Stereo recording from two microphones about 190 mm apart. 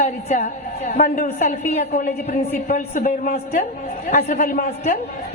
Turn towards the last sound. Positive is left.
turn(degrees=45)  # may be behind; listen again after turning